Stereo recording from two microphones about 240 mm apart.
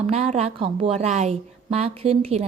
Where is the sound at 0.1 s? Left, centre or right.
Right.